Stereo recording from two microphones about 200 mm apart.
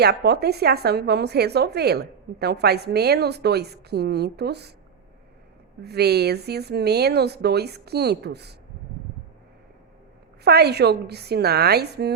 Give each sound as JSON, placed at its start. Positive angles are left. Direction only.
{"t": 0.0, "sound": "a woman's voice", "side_deg": -55}
{"t": 5.8, "sound": "a woman's voice", "side_deg": -55}
{"t": 10.4, "sound": "a woman's voice", "side_deg": -55}